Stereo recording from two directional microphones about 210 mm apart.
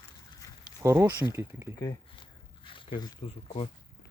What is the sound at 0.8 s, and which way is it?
Speech, 15° right (ahead or behind).